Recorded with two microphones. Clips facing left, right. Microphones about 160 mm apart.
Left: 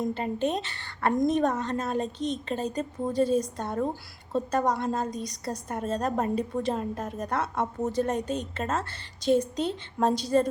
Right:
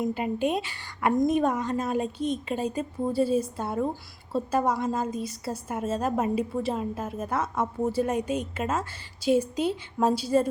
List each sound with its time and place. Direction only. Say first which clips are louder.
0.0 s a woman's voice: right 1 dB; 10° right (ahead or behind)